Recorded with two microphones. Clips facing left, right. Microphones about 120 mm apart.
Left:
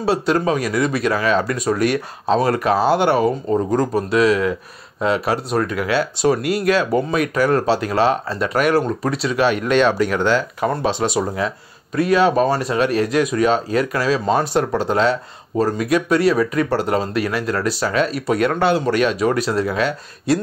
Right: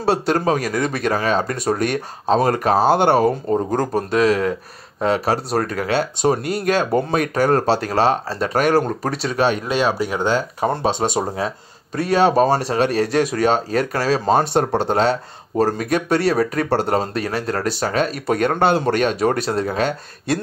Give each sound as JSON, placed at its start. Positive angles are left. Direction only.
{"t": 0.0, "sound": "speech", "side_deg": -50}
{"t": 9.8, "sound": "speech", "side_deg": -10}
{"t": 10.6, "sound": "speech", "side_deg": -30}
{"t": 17.6, "sound": "speech", "side_deg": -45}